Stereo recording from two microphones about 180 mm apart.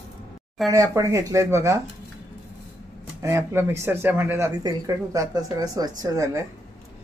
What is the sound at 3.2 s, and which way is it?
Speech, 15° right (ahead or behind).